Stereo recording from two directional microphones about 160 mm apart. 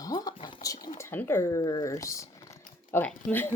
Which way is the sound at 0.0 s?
25° left (ahead or behind).